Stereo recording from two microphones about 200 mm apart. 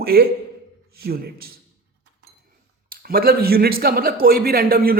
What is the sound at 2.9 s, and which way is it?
A man's voice, 50° right (ahead or behind).